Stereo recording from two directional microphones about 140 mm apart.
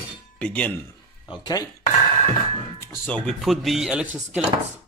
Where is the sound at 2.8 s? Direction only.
15° left (ahead or behind).